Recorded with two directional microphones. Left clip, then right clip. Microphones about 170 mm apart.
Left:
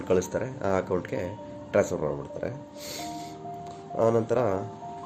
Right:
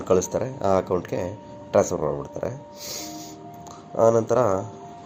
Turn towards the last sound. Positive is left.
turn(degrees=-10)  # may be behind; listen again after turning